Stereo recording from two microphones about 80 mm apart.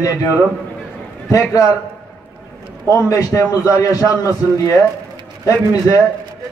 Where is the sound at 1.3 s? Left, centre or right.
Left.